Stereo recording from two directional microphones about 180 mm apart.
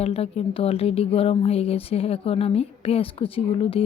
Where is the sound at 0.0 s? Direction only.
35° left (ahead or behind).